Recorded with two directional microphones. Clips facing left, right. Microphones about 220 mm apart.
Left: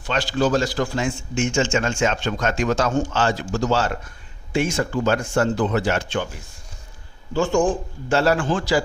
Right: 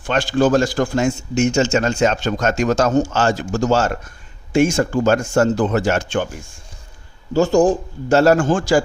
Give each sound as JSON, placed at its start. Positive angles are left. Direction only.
{"t": 0.0, "sound": "a man's voice", "side_deg": -50}
{"t": 7.3, "sound": "a man's voice", "side_deg": -40}